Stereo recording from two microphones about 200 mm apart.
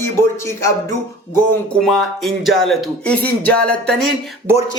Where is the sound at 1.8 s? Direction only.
Centre (ahead or behind).